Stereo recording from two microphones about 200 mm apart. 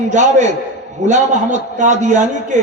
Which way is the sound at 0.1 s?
35° right (ahead or behind).